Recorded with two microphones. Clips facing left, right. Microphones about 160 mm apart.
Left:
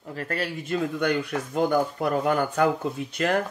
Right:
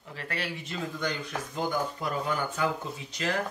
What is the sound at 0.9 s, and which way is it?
Speech, 60° left (ahead or behind).